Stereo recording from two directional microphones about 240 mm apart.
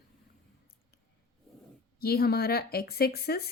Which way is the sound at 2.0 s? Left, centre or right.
Left.